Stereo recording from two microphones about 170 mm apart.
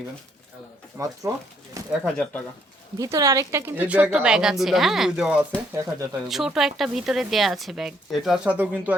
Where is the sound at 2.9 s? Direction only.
20° right (ahead or behind).